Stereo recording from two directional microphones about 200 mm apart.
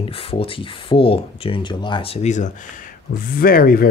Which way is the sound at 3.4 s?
45° left (ahead or behind).